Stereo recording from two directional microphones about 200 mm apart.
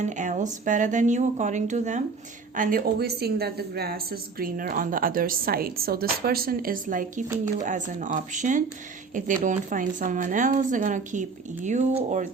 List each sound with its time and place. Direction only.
0.0 s a woman's voice: 40° right (ahead or behind)